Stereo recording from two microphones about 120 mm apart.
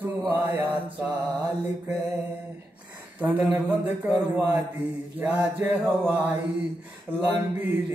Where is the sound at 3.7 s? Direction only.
15° right (ahead or behind).